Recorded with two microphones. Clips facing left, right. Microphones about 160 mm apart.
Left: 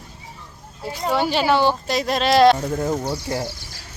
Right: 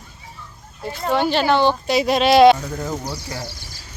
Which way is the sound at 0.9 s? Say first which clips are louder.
Right 1 dB; 10° left (ahead or behind).